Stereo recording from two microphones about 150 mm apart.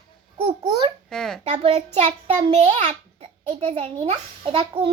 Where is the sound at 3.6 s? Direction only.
45° right (ahead or behind).